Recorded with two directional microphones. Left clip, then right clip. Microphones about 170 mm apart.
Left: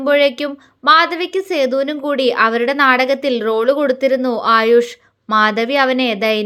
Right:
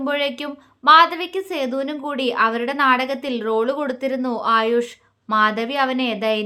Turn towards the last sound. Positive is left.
turn(degrees=25)  # may be behind; listen again after turning